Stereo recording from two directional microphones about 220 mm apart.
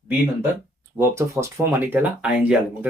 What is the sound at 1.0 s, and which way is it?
Speech, 10° right (ahead or behind).